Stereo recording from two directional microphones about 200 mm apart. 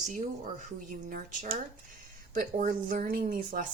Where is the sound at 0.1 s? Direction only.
40° right (ahead or behind).